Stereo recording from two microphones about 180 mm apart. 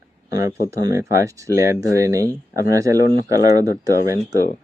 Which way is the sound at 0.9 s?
15° right (ahead or behind).